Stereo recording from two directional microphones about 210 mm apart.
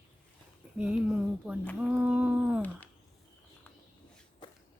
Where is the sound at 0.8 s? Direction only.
5° right (ahead or behind).